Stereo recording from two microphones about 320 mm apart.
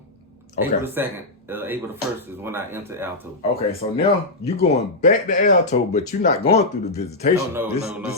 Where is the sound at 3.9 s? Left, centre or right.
Centre.